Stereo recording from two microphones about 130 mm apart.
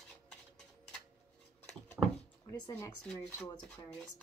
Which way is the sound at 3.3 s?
20° left (ahead or behind).